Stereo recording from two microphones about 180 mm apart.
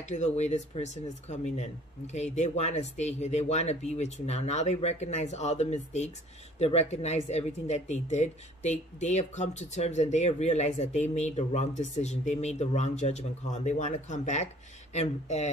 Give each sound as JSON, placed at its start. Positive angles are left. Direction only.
{"t": 0.0, "sound": "speech", "side_deg": 40}